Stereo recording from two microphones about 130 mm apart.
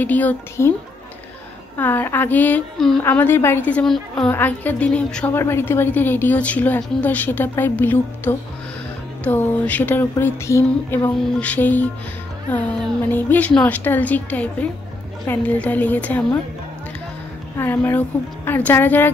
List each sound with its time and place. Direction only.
0.0 s a woman's voice: 15° left (ahead or behind)
1.8 s a woman's voice: 15° left (ahead or behind)
3.8 s a woman's voice: 5° left (ahead or behind)
4.3 s a woman's voice: 15° left (ahead or behind)
11.3 s a woman's voice: 10° left (ahead or behind)
17.6 s a woman's voice: 15° left (ahead or behind)